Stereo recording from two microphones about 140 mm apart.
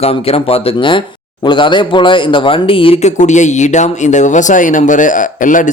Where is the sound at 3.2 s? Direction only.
60° left (ahead or behind).